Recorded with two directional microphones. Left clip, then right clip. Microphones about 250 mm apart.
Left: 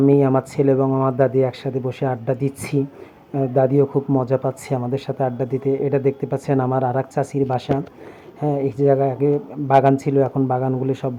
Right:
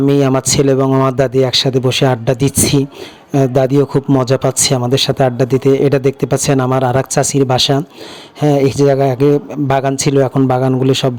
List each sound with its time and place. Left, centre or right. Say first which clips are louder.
0.0 s speech: right 3 dB; right